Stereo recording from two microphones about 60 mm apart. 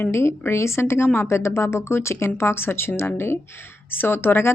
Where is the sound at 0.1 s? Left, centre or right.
Left.